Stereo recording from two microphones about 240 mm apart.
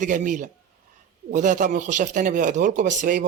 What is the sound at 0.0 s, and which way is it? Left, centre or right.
Speech, right.